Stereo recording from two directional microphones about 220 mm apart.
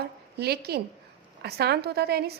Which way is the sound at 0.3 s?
45° right (ahead or behind).